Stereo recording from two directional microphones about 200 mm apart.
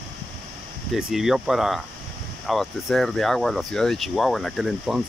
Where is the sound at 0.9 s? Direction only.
Centre (ahead or behind).